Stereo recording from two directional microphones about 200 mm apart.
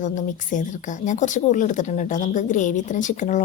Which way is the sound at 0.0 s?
40° left (ahead or behind).